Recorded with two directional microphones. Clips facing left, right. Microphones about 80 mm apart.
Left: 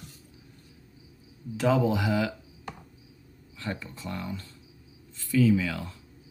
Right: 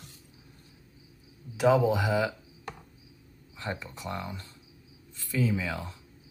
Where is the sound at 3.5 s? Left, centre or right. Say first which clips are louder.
Even; right.